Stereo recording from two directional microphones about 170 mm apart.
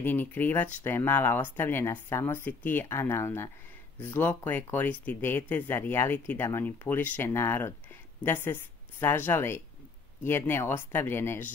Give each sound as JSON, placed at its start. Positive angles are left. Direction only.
{"t": 0.0, "sound": "speech", "side_deg": 10}